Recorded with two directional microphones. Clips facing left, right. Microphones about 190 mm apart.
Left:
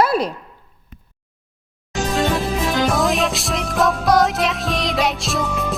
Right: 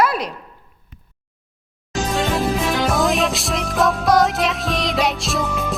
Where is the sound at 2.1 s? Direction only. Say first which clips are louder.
Even; centre (ahead or behind).